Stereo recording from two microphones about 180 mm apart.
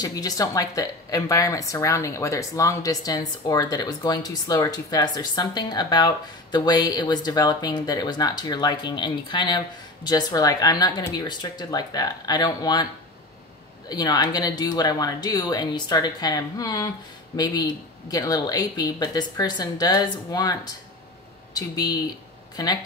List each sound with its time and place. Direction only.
0.0 s speech: 20° left (ahead or behind)
13.8 s speech: 20° left (ahead or behind)
18.1 s speech: 20° left (ahead or behind)
21.5 s speech: 20° left (ahead or behind)